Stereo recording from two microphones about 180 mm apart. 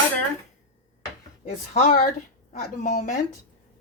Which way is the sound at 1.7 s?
45° left (ahead or behind).